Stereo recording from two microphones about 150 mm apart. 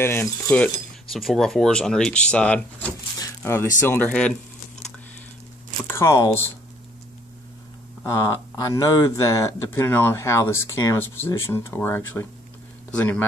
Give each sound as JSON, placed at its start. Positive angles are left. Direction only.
{"t": 0.0, "sound": "speech", "side_deg": 15}
{"t": 1.1, "sound": "speech", "side_deg": 0}
{"t": 3.2, "sound": "a sound", "side_deg": 20}
{"t": 3.8, "sound": "speech", "side_deg": 10}
{"t": 5.9, "sound": "speech", "side_deg": 15}
{"t": 8.0, "sound": "speech", "side_deg": 20}